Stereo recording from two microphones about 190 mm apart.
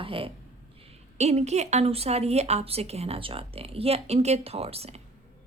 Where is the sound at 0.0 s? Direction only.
30° right (ahead or behind).